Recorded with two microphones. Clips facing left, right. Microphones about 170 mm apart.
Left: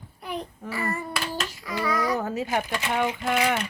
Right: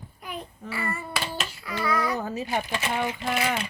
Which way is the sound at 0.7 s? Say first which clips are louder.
Left 2 dB; 40° left (ahead or behind).